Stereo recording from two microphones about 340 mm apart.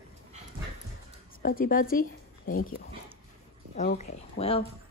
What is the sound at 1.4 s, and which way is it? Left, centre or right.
Speech, left.